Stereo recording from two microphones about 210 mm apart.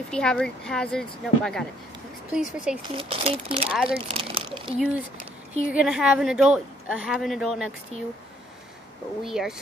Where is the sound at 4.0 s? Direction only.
25° right (ahead or behind).